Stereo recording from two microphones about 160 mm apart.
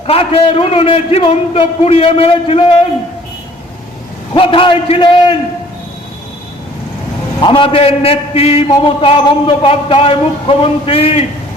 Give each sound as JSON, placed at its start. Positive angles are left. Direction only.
{"t": 0.1, "sound": "a man's voice", "side_deg": 35}
{"t": 4.4, "sound": "a man's voice", "side_deg": 35}
{"t": 7.4, "sound": "a man's voice", "side_deg": 30}